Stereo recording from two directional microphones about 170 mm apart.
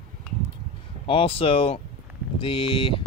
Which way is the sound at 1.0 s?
35° left (ahead or behind).